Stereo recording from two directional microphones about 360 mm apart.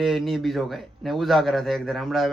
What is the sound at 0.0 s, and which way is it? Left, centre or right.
A man's voice, centre.